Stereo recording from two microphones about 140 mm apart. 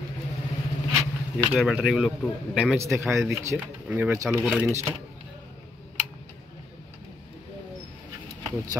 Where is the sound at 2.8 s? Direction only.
20° right (ahead or behind).